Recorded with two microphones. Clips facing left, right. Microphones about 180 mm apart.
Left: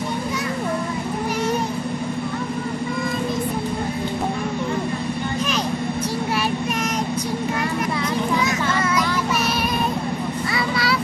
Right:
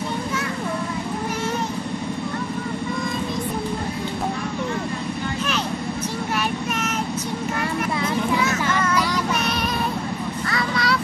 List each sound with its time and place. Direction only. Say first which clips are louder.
8.5 s child singing: even; 10° left (ahead or behind)
10.5 s vehicle: even; 5° left (ahead or behind)